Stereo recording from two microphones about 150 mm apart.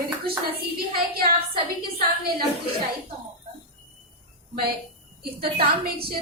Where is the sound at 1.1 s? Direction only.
90° right.